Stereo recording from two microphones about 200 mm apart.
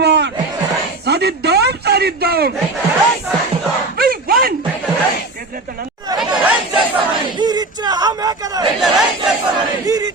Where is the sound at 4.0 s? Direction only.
45° right (ahead or behind).